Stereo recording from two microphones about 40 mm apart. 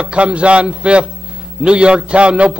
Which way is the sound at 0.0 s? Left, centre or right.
Right.